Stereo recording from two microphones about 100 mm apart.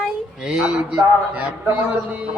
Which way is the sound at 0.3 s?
5° right (ahead or behind).